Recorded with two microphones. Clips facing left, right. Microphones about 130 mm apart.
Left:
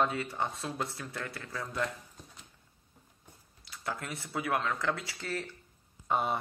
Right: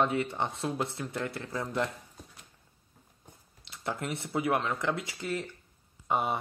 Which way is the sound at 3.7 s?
25° right (ahead or behind).